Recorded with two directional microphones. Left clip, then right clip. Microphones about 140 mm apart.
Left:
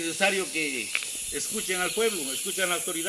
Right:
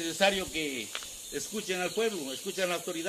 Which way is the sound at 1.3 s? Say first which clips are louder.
Left 3 dB; 40° right (ahead or behind).